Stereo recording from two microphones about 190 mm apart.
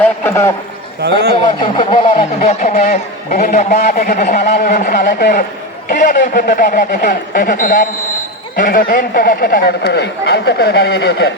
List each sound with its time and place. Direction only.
0.0 s a man's voice: 10° left (ahead or behind)
1.0 s a man's voice: 60° right (ahead or behind)
1.5 s speech: 25° left (ahead or behind)
2.5 s a man's voice: 40° left (ahead or behind); by 11.3 s 65° left (ahead or behind)